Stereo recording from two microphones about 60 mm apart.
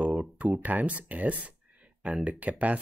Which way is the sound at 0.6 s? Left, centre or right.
Right.